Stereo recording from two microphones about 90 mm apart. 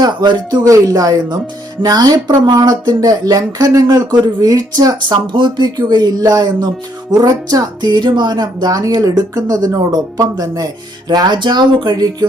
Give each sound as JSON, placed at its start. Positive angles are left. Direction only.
{"t": 0.0, "sound": "speech", "side_deg": -55}
{"t": 5.3, "sound": "speech", "side_deg": -60}